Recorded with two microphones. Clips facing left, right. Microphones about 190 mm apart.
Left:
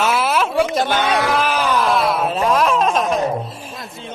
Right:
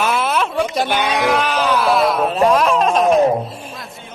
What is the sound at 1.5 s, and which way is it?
Speech, 10° left (ahead or behind).